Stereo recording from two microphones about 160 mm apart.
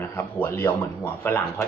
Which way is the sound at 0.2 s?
15° left (ahead or behind).